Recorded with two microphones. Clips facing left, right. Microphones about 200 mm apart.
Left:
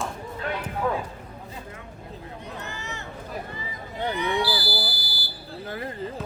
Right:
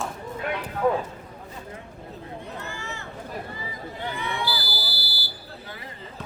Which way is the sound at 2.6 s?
20° left (ahead or behind).